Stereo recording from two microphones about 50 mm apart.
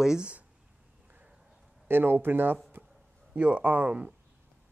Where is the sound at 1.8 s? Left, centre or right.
Right.